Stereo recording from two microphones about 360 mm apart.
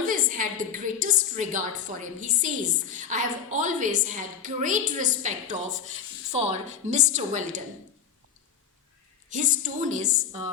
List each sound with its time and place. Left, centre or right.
0.1 s a woman's voice: right
9.3 s a woman's voice: right